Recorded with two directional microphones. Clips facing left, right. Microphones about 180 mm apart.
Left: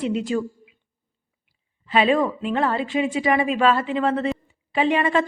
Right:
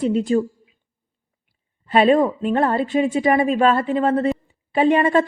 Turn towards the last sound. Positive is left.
turn(degrees=-45)  # may be behind; listen again after turning